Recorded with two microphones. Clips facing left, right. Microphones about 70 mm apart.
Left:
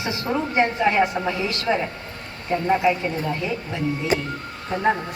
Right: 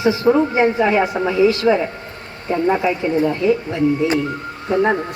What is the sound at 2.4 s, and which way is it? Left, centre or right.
Speech, right.